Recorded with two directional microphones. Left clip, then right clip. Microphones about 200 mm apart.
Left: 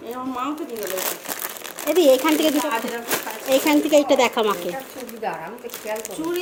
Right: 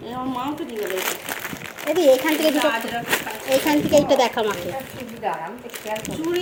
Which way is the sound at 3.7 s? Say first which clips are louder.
Even; 15° left (ahead or behind).